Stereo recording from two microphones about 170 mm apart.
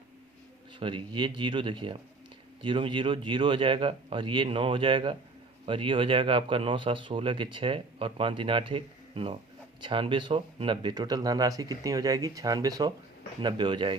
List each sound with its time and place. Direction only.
0.8 s speech: 30° right (ahead or behind)